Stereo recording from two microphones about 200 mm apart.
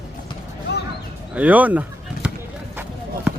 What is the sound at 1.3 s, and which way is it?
Basketball bounce, 5° right (ahead or behind).